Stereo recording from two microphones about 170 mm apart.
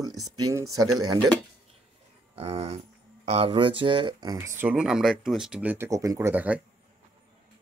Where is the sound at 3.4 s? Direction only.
30° right (ahead or behind); by 6.6 s 10° right (ahead or behind).